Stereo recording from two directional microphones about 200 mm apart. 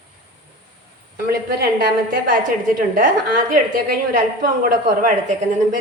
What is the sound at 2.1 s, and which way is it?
A woman's voice, 45° right (ahead or behind).